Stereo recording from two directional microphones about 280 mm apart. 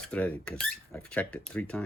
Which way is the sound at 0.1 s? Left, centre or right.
Centre.